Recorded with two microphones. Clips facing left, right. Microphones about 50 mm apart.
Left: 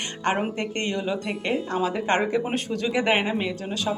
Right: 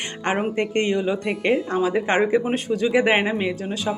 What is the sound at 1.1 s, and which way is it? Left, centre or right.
A woman's voice, right.